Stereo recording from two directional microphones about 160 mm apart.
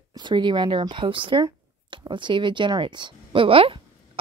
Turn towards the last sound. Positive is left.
turn(degrees=-35)  # may be behind; listen again after turning